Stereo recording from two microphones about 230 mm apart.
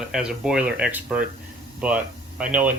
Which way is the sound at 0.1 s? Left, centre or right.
Centre.